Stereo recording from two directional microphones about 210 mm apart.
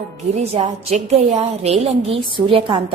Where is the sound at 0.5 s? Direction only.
30° right (ahead or behind).